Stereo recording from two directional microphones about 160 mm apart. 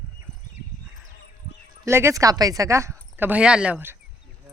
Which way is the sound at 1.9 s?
15° right (ahead or behind).